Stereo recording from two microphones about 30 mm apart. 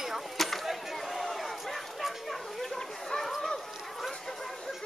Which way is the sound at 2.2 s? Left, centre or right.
Centre.